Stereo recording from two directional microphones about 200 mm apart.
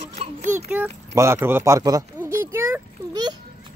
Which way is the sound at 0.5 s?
10° right (ahead or behind).